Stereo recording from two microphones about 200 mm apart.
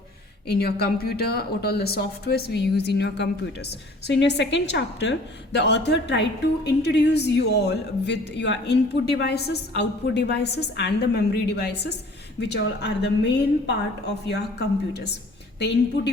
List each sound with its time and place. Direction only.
0.4 s a woman's voice: 50° left (ahead or behind)